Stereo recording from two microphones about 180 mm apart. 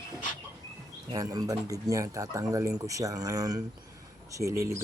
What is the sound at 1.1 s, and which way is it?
Speech, 20° right (ahead or behind).